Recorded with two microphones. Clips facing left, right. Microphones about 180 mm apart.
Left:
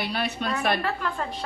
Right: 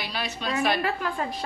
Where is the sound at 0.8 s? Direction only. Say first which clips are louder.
Right 1 dB; 10° right (ahead or behind).